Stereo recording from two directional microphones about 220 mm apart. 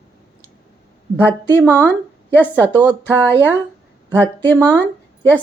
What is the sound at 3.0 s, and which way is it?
Speech, 10° left (ahead or behind).